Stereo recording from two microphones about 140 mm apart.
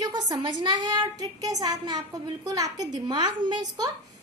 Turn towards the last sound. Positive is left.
turn(degrees=-30)  # may be behind; listen again after turning